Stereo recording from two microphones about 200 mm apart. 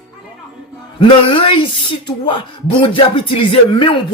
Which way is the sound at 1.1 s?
25° left (ahead or behind).